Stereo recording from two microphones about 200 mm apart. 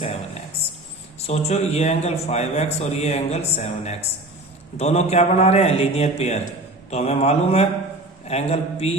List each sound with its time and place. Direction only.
1.3 s a man's voice: 35° left (ahead or behind)